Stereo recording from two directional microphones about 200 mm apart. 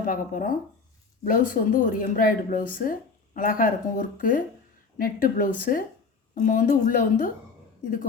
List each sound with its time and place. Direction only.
0.0 s a woman's voice: 45° left (ahead or behind)